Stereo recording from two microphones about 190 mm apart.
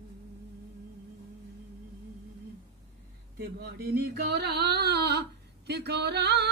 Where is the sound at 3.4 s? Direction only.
55° right (ahead or behind).